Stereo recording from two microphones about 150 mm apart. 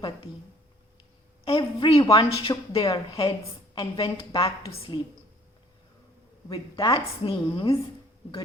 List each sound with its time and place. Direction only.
1.5 s a woman's voice: 35° left (ahead or behind)
6.5 s a woman's voice: 25° left (ahead or behind)